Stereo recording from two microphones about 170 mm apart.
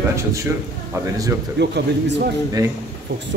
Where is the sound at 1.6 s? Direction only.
85° right.